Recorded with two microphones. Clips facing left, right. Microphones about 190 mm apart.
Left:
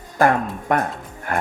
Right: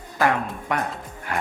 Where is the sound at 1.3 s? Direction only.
50° left (ahead or behind).